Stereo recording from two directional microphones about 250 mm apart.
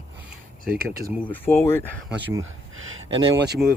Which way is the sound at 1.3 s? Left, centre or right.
Centre.